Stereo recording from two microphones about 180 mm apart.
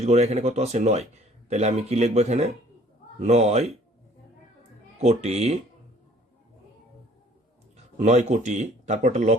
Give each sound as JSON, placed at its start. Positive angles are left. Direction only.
{"t": 0.0, "sound": "speech", "side_deg": -40}
{"t": 4.9, "sound": "speech", "side_deg": -35}
{"t": 7.9, "sound": "speech", "side_deg": -40}